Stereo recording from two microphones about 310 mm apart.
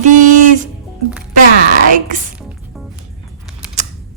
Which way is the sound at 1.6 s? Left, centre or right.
Right.